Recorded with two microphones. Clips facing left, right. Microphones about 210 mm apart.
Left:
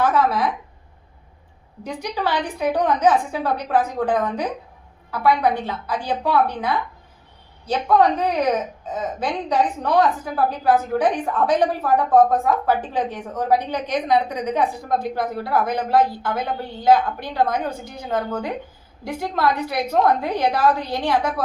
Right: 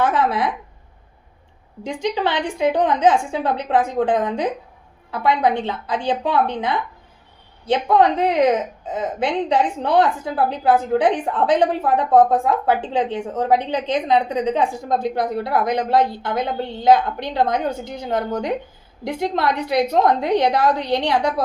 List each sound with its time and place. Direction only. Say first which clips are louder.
0.0 s a woman's voice: even; 30° right (ahead or behind)
2.1 s a woman's voice: right 2 dB; 25° right (ahead or behind)